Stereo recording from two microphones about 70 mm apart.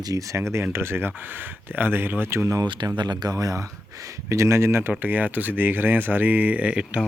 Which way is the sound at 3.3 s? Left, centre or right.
Right.